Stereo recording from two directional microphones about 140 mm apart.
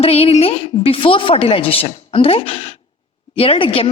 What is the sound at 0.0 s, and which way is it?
A woman's voice, 45° left (ahead or behind).